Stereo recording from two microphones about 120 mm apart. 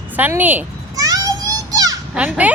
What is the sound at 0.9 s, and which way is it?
Children playing, 30° right (ahead or behind).